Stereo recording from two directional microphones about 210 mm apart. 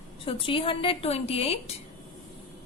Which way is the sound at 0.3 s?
25° left (ahead or behind).